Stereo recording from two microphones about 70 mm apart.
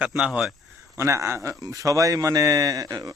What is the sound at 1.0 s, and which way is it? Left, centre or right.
Speech, right.